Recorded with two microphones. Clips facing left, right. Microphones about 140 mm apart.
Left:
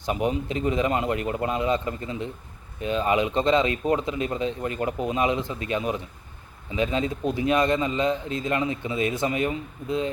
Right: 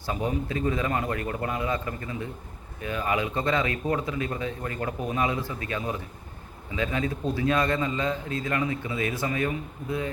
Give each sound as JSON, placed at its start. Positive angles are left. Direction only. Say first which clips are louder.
{"t": 0.0, "sound": "a man's voice", "louder": "left 3 dB", "side_deg": 20}